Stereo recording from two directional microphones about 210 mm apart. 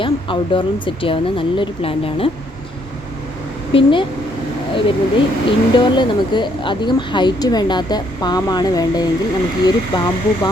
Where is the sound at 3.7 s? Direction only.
25° left (ahead or behind).